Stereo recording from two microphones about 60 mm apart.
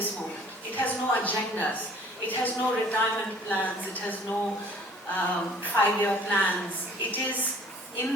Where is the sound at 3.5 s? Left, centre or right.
Left.